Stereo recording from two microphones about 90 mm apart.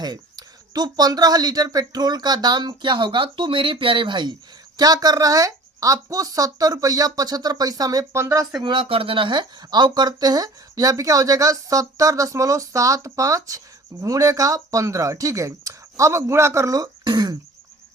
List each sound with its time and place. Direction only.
0.0 s speech: 50° right (ahead or behind)
4.8 s speech: 45° right (ahead or behind)
8.1 s speech: 30° right (ahead or behind)
8.6 s speech: 80° right; by 17.3 s 50° right (ahead or behind)